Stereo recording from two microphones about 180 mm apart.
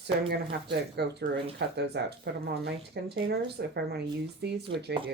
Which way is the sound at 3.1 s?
60° right (ahead or behind).